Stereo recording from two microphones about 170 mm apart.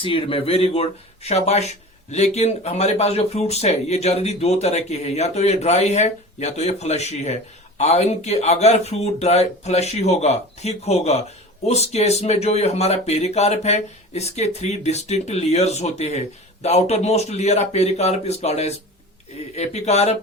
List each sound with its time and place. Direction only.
0.0 s speech: 30° left (ahead or behind)